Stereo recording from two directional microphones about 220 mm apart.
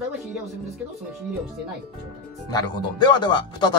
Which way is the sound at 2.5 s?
20° left (ahead or behind).